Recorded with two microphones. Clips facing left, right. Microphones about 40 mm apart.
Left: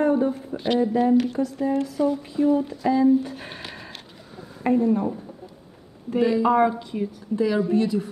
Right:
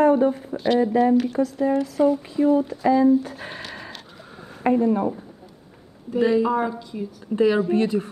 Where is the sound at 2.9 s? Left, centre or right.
Right.